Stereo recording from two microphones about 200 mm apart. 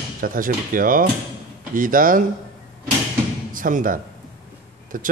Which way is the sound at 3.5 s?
45° right (ahead or behind).